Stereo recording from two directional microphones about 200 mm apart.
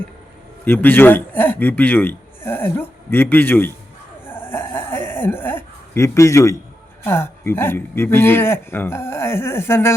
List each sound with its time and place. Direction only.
0.6 s a man's voice: 10° left (ahead or behind)
4.3 s a sound: 10° left (ahead or behind)
7.0 s a man's voice: 10° left (ahead or behind)